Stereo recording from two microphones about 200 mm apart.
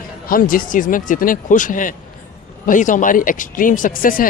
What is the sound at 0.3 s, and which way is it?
Speech, 45° left (ahead or behind).